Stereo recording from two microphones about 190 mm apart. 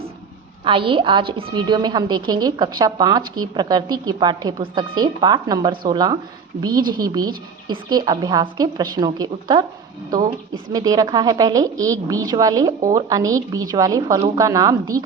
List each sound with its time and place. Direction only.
0.6 s a woman's voice: 25° right (ahead or behind)
10.7 s a woman's voice: 20° right (ahead or behind)